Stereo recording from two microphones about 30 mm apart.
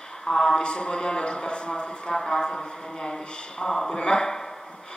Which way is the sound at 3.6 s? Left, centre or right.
Centre.